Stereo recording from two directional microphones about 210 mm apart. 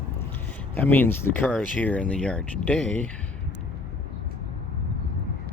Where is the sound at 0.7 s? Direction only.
10° left (ahead or behind).